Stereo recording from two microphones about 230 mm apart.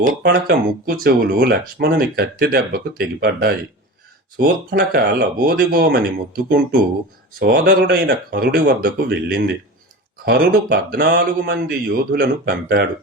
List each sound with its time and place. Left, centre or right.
0.2 s speech: right